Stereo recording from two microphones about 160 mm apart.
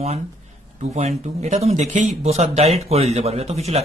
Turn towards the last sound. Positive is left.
turn(degrees=-40)  # may be behind; listen again after turning